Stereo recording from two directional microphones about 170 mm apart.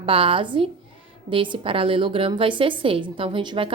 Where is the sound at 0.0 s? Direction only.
30° right (ahead or behind).